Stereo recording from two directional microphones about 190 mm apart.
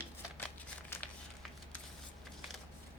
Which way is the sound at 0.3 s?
10° left (ahead or behind).